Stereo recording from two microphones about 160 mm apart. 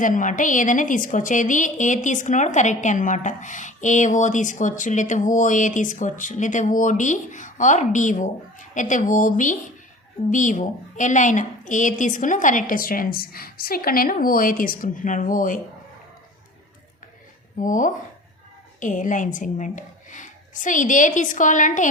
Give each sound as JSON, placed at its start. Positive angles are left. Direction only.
{"t": 0.0, "sound": "a woman's voice", "side_deg": 55}
{"t": 17.6, "sound": "a woman's voice", "side_deg": 55}